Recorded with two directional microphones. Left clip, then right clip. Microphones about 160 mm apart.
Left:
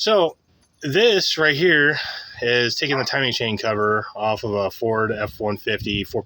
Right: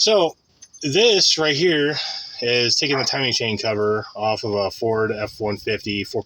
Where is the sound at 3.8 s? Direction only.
25° left (ahead or behind).